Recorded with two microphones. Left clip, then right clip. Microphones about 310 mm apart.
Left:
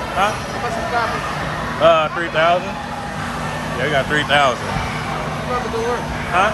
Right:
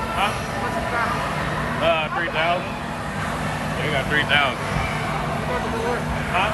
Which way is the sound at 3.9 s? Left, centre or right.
Centre.